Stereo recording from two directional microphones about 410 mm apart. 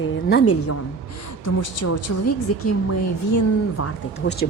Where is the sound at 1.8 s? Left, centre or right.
Left.